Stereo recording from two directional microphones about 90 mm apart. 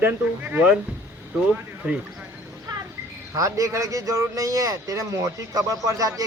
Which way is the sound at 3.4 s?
40° right (ahead or behind).